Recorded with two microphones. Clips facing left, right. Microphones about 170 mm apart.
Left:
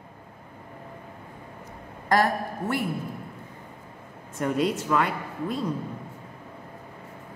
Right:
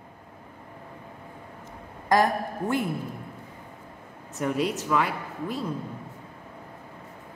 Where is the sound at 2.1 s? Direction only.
15° right (ahead or behind).